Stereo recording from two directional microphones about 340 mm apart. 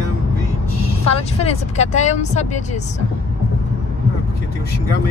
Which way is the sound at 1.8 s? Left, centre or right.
Centre.